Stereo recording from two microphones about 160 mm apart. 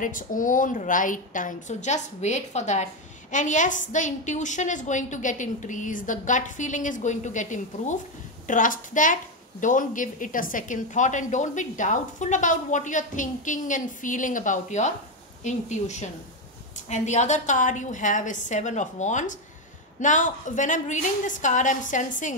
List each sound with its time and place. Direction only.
0.0 s a woman's voice: 55° left (ahead or behind)